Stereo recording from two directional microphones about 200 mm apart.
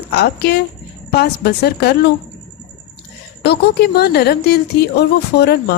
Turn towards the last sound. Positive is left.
turn(degrees=55)  # may be behind; listen again after turning